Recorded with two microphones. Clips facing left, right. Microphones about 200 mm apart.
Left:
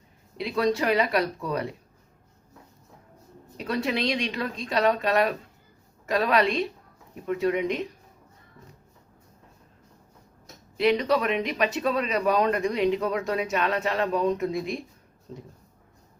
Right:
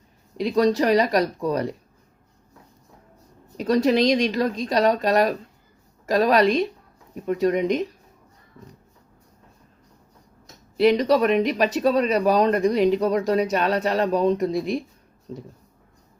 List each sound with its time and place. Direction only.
0.3 s speech: 40° right (ahead or behind)
3.6 s speech: 40° right (ahead or behind)
10.8 s speech: 40° right (ahead or behind)